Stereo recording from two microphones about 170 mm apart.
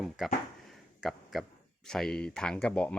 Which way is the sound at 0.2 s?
Centre (ahead or behind).